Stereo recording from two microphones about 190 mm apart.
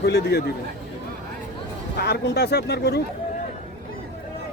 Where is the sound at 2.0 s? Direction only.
55° left (ahead or behind).